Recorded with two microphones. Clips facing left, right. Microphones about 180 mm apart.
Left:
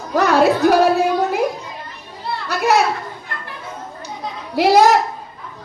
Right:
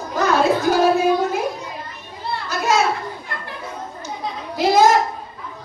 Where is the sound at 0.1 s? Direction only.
70° left (ahead or behind).